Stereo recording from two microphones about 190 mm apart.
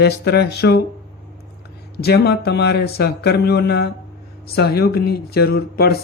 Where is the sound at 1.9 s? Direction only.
60° left (ahead or behind).